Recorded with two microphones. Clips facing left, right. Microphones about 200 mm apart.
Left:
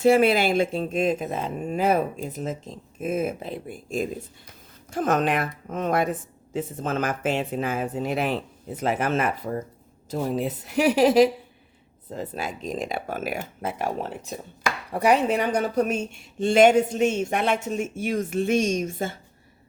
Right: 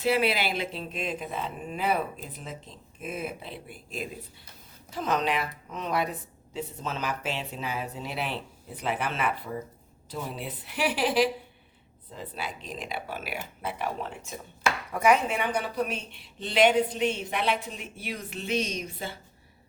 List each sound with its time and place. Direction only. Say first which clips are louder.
0.0 s a woman's voice: left 8 dB; 45° left (ahead or behind)